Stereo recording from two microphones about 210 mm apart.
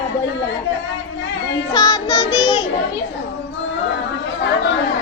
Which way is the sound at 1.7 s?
20° left (ahead or behind).